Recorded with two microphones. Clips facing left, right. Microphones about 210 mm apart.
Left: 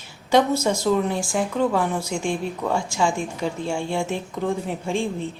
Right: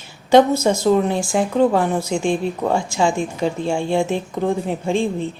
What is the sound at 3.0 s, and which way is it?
A woman's voice, 25° right (ahead or behind).